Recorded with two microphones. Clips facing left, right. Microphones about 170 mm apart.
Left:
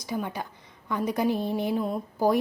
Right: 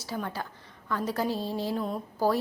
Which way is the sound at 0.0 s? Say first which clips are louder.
Left 3 dB; 15° left (ahead or behind).